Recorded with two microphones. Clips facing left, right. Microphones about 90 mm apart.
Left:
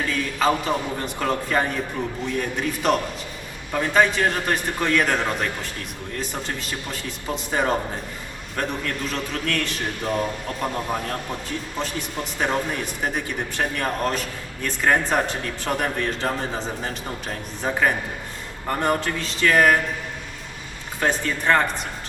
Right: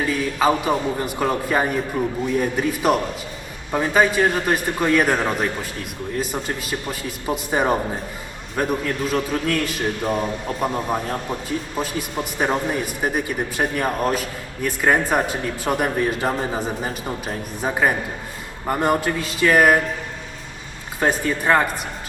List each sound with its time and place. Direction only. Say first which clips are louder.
0.0 s speech: right 3 dB; 15° right (ahead or behind)
21.0 s speech: right 3 dB; 15° right (ahead or behind)